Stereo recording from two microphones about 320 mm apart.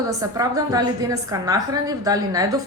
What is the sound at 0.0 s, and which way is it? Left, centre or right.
A woman's voice, centre.